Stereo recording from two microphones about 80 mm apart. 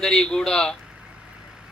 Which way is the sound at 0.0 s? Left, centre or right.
Centre.